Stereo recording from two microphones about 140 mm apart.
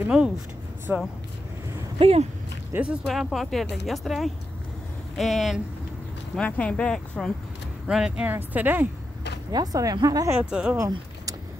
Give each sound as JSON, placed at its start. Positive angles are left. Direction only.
{"t": 0.1, "sound": "speech", "side_deg": -5}
{"t": 2.0, "sound": "speech", "side_deg": -45}
{"t": 2.7, "sound": "speech", "side_deg": -10}
{"t": 7.8, "sound": "speech", "side_deg": -5}
{"t": 9.5, "sound": "speech", "side_deg": -25}
{"t": 10.5, "sound": "speech", "side_deg": -5}
{"t": 10.8, "sound": "vehicle", "side_deg": -25}